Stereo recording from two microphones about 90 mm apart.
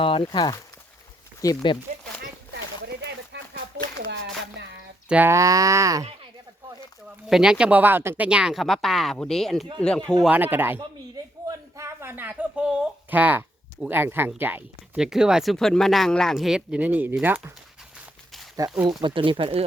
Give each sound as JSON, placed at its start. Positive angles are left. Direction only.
{"t": 0.0, "sound": "speech", "side_deg": 80}
{"t": 0.3, "sound": "speech", "side_deg": 55}
{"t": 1.4, "sound": "speech", "side_deg": 40}
{"t": 5.0, "sound": "speech", "side_deg": -15}
{"t": 5.3, "sound": "speech", "side_deg": -35}
{"t": 7.3, "sound": "speech", "side_deg": -5}
{"t": 8.3, "sound": "speech", "side_deg": -10}
{"t": 10.2, "sound": "speech", "side_deg": -20}
{"t": 11.4, "sound": "a sound", "side_deg": -30}
{"t": 13.8, "sound": "speech", "side_deg": -25}
{"t": 14.9, "sound": "speech", "side_deg": -5}
{"t": 15.5, "sound": "speech", "side_deg": 5}
{"t": 18.9, "sound": "speech", "side_deg": -70}